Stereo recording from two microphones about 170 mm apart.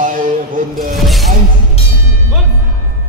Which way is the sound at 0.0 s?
50° right (ahead or behind).